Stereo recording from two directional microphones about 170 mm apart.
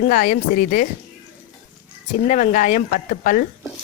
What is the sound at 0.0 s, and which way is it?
Speech, 55° left (ahead or behind).